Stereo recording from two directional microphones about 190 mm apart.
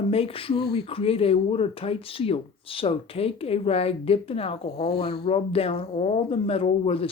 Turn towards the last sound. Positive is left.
turn(degrees=30)  # may be behind; listen again after turning